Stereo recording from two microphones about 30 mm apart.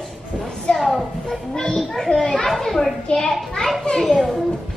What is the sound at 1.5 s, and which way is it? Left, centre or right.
Children playing, left.